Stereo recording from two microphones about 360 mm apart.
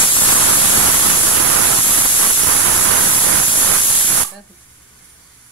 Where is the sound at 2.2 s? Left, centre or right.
Right.